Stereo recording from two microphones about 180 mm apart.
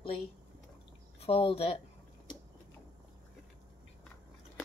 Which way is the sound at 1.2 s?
30° left (ahead or behind).